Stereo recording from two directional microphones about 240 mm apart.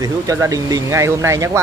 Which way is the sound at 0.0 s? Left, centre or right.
Centre.